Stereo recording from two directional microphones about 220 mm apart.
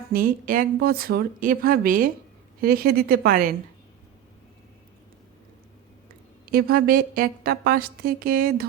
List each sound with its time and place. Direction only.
0.1 s a woman's voice: 40° right (ahead or behind)
6.5 s a woman's voice: 45° right (ahead or behind)